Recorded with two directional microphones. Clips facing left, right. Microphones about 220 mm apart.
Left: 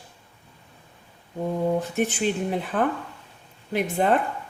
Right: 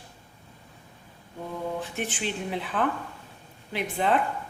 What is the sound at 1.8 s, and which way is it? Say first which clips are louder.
A woman's voice: left 7 dB; 45° left (ahead or behind).